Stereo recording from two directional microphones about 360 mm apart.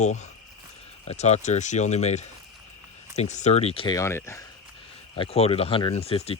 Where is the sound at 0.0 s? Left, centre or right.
Centre.